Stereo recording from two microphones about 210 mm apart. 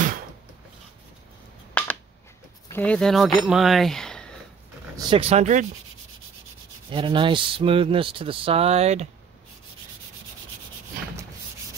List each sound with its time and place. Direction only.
1.7 s a sound: 10° left (ahead or behind)
2.7 s speech: 5° left (ahead or behind)
4.9 s speech: 30° right (ahead or behind)
6.9 s speech: 25° right (ahead or behind)